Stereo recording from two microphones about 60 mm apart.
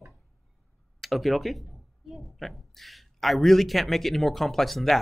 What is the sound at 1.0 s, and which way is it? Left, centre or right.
Speech, centre.